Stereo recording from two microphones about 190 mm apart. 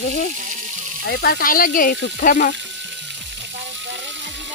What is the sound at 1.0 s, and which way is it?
Speech, 60° left (ahead or behind).